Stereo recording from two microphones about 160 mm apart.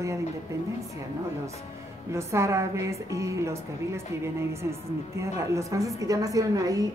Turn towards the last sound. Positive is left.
turn(degrees=-20)  # may be behind; listen again after turning